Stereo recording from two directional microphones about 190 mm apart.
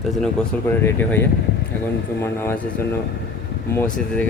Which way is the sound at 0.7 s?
10° left (ahead or behind).